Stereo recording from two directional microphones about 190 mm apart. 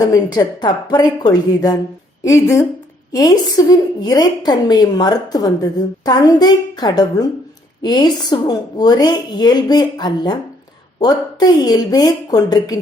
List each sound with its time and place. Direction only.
0.0 s a woman's voice: 20° left (ahead or behind)